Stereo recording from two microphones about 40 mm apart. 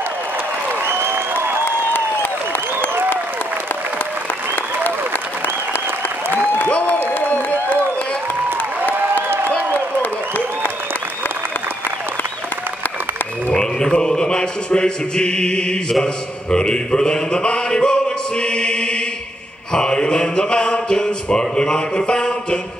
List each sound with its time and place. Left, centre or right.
0.8 s applause: right
7.1 s a sound: left
13.9 s chant: centre
16.0 s a man's voice: left
18.4 s chant: left
19.7 s mantra: centre